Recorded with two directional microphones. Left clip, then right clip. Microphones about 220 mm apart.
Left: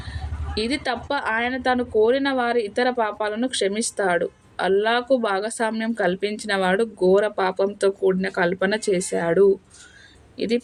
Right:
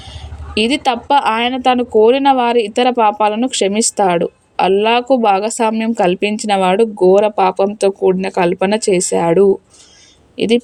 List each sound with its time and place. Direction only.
0.5 s speech: 30° right (ahead or behind)